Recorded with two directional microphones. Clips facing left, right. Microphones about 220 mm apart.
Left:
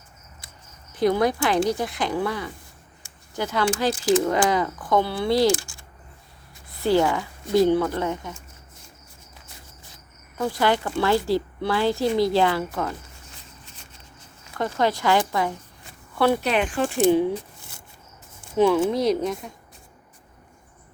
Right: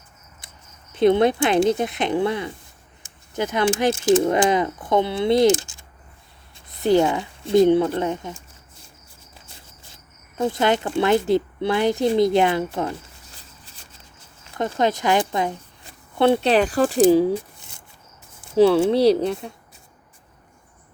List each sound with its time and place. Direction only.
0.9 s speech: 25° right (ahead or behind)
9.5 s cricket: 25° right (ahead or behind)
12.0 s a sound: 20° right (ahead or behind)
14.6 s speech: 20° right (ahead or behind); by 17.3 s 35° right (ahead or behind)
18.5 s speech: 30° right (ahead or behind)